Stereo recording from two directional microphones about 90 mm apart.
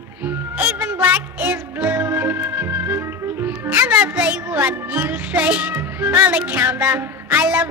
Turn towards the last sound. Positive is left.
turn(degrees=-20)  # may be behind; listen again after turning